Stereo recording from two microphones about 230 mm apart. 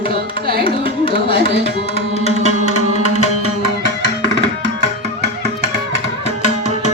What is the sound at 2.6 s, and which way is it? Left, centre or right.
Music, left.